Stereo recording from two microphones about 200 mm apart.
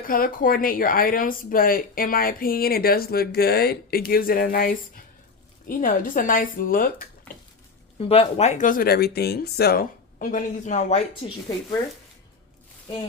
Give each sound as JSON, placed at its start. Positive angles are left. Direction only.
{"t": 0.1, "sound": "speech", "side_deg": 45}
{"t": 7.9, "sound": "speech", "side_deg": 30}